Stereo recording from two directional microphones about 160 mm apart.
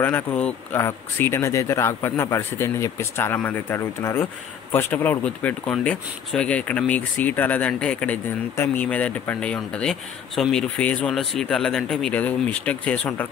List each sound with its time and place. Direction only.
0.0 s speech: 10° left (ahead or behind)